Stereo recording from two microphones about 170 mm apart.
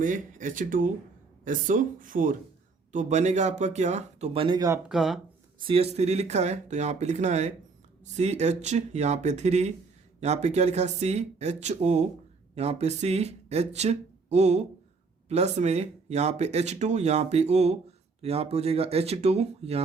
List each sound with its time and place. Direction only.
0.0 s speech: 50° right (ahead or behind); by 4.8 s 20° right (ahead or behind)
4.9 s speech: centre (ahead or behind)
5.5 s speech: 30° right (ahead or behind)